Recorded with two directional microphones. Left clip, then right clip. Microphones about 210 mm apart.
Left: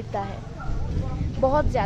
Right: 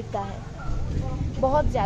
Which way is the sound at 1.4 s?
5° left (ahead or behind).